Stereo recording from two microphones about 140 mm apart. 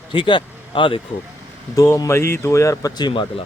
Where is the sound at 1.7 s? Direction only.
20° left (ahead or behind).